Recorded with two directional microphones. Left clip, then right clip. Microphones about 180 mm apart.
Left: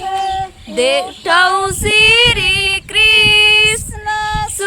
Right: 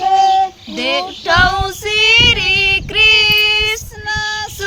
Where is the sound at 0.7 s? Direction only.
35° left (ahead or behind).